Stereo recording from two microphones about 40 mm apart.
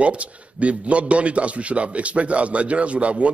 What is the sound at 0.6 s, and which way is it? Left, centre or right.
A man's voice, right.